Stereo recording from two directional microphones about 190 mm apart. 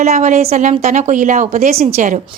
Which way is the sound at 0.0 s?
40° right (ahead or behind).